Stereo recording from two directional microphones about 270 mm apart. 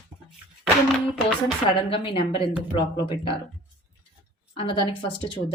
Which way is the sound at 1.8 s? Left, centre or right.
Centre.